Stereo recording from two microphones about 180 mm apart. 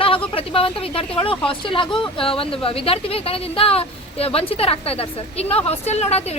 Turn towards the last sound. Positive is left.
turn(degrees=35)  # may be behind; listen again after turning